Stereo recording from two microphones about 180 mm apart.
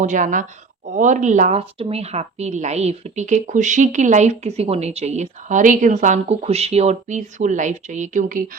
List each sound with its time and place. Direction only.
0.0 s speech: 45° right (ahead or behind)